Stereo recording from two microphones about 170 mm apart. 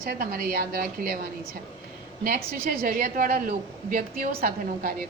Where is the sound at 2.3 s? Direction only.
60° right (ahead or behind).